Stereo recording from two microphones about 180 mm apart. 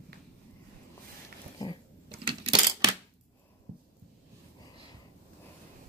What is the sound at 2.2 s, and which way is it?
Coin, 30° right (ahead or behind).